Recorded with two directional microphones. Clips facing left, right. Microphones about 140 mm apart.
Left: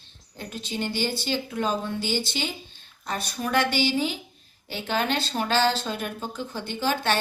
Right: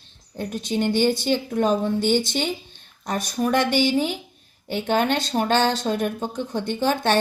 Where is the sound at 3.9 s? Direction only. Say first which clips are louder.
Right 4 dB; 45° right (ahead or behind).